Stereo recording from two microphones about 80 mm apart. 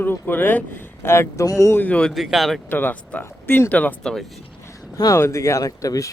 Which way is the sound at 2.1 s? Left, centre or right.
Centre.